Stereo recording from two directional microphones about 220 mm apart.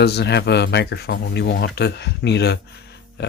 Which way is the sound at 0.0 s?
50° left (ahead or behind).